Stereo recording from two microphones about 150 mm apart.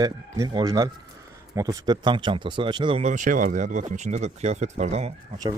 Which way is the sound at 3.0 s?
55° right (ahead or behind).